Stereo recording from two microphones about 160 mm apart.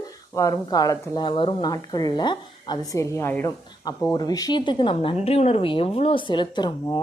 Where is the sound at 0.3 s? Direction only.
20° left (ahead or behind).